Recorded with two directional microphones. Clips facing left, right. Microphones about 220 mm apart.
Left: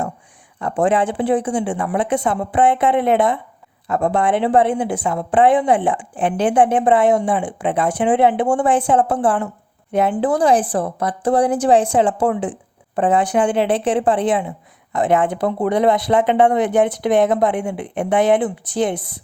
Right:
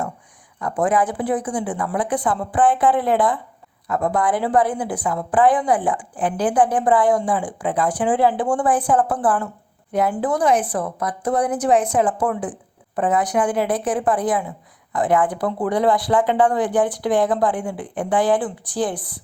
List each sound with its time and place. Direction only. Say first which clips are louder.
0.6 s a woman's voice: left 2 dB; 25° left (ahead or behind)